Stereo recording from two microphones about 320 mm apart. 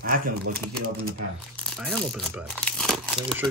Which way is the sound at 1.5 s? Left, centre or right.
Centre.